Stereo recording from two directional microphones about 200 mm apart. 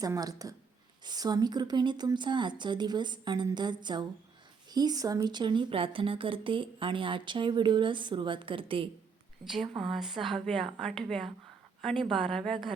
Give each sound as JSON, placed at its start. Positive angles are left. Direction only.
{"t": 0.0, "sound": "a woman's voice", "side_deg": -15}
{"t": 9.4, "sound": "a woman's voice", "side_deg": 0}